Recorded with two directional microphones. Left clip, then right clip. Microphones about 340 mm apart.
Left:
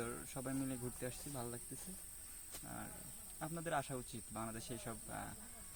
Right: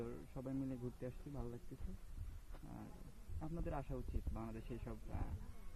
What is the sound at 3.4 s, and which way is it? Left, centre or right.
Speech, centre.